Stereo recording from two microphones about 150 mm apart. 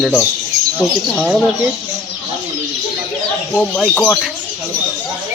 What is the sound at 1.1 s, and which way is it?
Speech, centre (ahead or behind).